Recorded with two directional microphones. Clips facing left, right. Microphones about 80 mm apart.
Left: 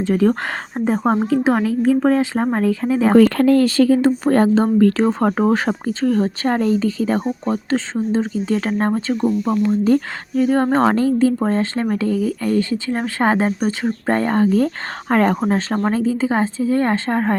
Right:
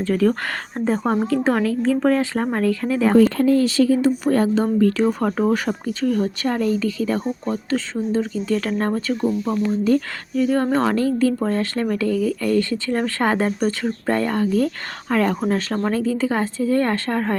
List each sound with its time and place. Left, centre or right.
0.0 s speech: left
3.2 s speech: left
3.8 s speech: left
4.4 s speech: left
9.2 s speech: centre
9.8 s speech: left; by 13.7 s centre
13.8 s speech: left